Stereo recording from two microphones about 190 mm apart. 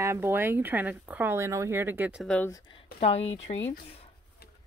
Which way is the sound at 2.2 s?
5° left (ahead or behind).